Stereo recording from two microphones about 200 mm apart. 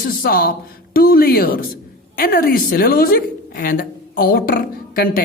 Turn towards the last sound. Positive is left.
turn(degrees=45)  # may be behind; listen again after turning